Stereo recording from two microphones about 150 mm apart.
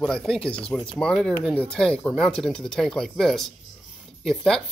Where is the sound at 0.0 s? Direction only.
Centre (ahead or behind).